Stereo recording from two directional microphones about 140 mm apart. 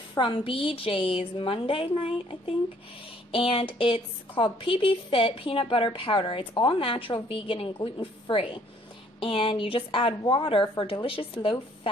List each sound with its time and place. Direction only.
0.2 s a woman's voice: 40° left (ahead or behind)